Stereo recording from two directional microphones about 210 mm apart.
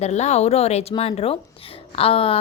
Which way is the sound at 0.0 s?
30° left (ahead or behind).